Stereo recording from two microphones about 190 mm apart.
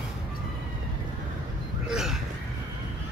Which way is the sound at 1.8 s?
Centre (ahead or behind).